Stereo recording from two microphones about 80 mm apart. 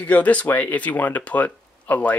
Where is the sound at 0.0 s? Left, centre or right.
Centre.